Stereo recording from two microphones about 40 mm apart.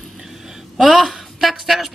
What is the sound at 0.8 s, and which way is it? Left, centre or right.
Speech, centre.